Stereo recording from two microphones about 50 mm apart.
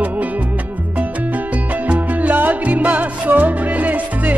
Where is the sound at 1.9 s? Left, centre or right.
Right.